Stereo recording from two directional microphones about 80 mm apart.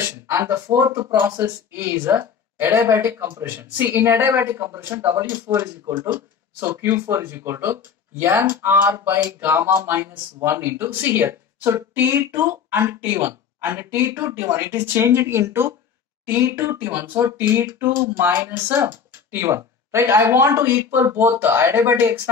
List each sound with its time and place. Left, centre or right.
0.0 s a woman's voice: right